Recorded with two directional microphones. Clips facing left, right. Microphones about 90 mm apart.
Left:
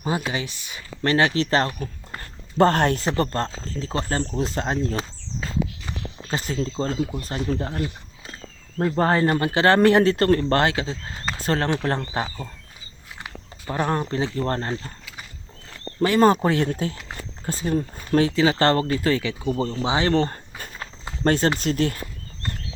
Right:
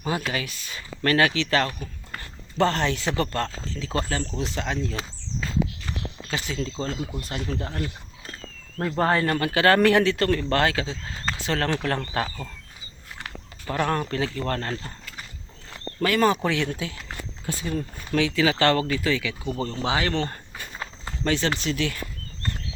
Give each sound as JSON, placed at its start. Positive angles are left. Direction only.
{"t": 0.0, "sound": "speech", "side_deg": 20}
{"t": 2.6, "sound": "speech", "side_deg": 50}
{"t": 3.0, "sound": "speech", "side_deg": 35}
{"t": 4.9, "sound": "a sound", "side_deg": 25}
{"t": 6.2, "sound": "speech", "side_deg": 40}
{"t": 9.0, "sound": "speech", "side_deg": 30}
{"t": 11.3, "sound": "speech", "side_deg": 40}
{"t": 11.6, "sound": "speech", "side_deg": 25}
{"t": 16.0, "sound": "speech", "side_deg": 25}
{"t": 16.2, "sound": "speech", "side_deg": 35}
{"t": 19.6, "sound": "speech", "side_deg": 20}
{"t": 20.1, "sound": "a sound", "side_deg": 30}
{"t": 21.2, "sound": "speech", "side_deg": 40}